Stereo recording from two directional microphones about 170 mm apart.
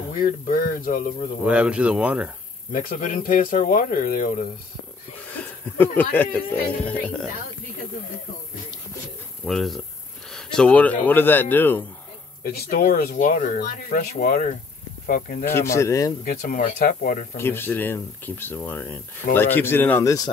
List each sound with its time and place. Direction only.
0.2 s speech: 60° left (ahead or behind)
1.4 s speech: 5° right (ahead or behind)
2.7 s speech: 55° left (ahead or behind)
5.3 s speech: 10° left (ahead or behind)
9.4 s speech: centre (ahead or behind)
12.4 s speech: 60° left (ahead or behind)
15.4 s speech: 15° left (ahead or behind)
16.3 s speech: 55° left (ahead or behind)
17.4 s speech: 15° left (ahead or behind)